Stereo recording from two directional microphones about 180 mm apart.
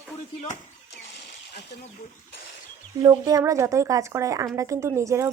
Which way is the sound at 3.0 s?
20° right (ahead or behind).